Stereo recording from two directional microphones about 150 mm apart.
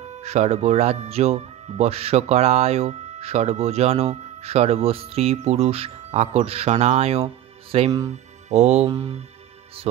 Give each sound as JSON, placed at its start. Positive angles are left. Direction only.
{"t": 0.2, "sound": "speech", "side_deg": -45}